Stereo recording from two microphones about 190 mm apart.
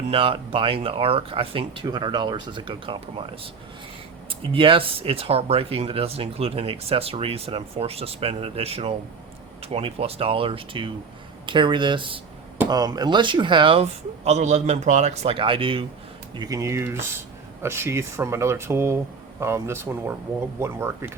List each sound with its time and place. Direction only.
0.1 s speech: 30° right (ahead or behind); by 21.1 s 10° right (ahead or behind)